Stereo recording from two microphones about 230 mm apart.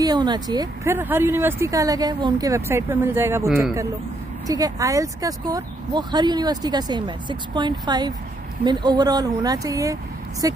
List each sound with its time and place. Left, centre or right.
0.0 s speech: centre